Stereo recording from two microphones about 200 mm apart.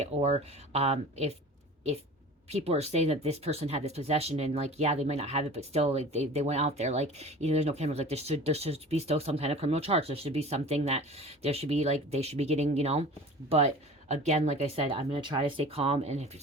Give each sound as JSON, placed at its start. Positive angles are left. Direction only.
{"t": 0.0, "sound": "speech", "side_deg": -35}
{"t": 2.5, "sound": "speech", "side_deg": -30}